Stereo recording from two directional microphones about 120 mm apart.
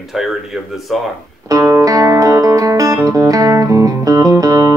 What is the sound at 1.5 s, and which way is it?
Music, 25° right (ahead or behind).